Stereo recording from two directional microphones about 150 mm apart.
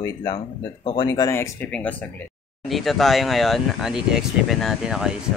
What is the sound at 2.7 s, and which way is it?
Speech, centre (ahead or behind).